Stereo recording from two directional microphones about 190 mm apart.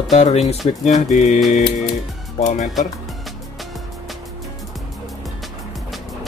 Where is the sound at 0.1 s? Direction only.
35° left (ahead or behind).